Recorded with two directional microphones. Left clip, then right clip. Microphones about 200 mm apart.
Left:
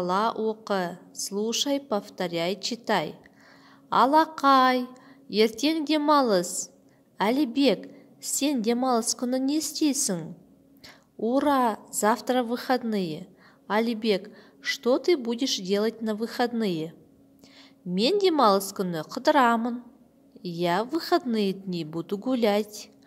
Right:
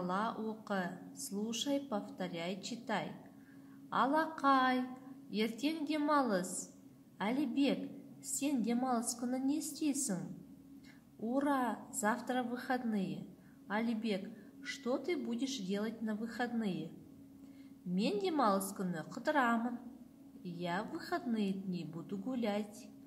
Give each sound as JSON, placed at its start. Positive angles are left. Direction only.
{"t": 0.0, "sound": "a woman's voice", "side_deg": 45}
{"t": 17.9, "sound": "a woman's voice", "side_deg": 45}